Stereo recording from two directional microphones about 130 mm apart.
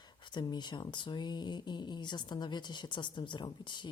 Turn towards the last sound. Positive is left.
turn(degrees=35)  # may be behind; listen again after turning